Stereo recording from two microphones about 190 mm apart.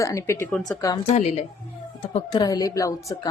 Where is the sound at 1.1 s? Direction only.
35° left (ahead or behind).